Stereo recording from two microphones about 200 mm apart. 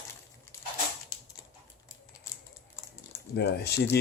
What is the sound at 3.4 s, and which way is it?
Speech, 55° left (ahead or behind).